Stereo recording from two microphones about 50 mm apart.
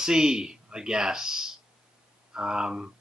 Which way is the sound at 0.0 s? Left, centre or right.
Centre.